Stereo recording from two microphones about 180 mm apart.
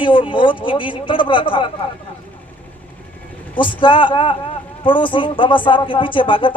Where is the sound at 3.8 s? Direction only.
25° left (ahead or behind).